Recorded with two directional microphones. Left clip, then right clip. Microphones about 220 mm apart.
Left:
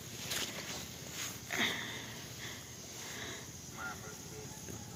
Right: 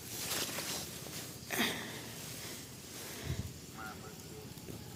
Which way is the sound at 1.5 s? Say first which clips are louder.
Even; 30° right (ahead or behind).